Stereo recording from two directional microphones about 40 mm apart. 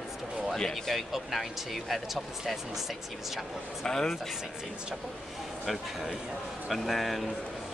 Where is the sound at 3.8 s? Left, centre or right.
Centre.